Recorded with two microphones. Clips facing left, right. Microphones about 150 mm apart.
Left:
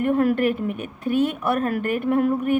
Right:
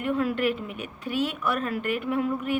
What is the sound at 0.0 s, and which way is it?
Speech, 55° left (ahead or behind).